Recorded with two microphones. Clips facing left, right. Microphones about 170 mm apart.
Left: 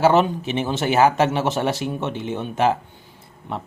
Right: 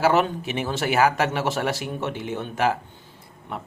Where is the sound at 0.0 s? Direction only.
25° left (ahead or behind).